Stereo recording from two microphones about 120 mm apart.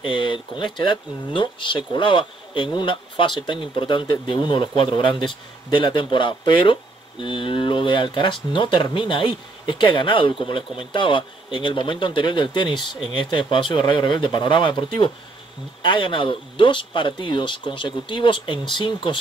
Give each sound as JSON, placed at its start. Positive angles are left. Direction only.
{"t": 0.0, "sound": "speech", "side_deg": 45}